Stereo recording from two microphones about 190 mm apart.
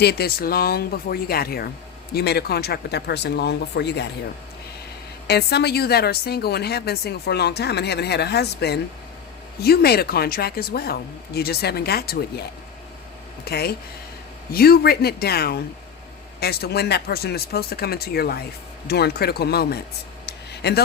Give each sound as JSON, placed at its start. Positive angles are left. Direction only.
{"t": 0.0, "sound": "a woman's voice", "side_deg": 55}
{"t": 5.3, "sound": "a woman's voice", "side_deg": 60}
{"t": 20.2, "sound": "a sound", "side_deg": 60}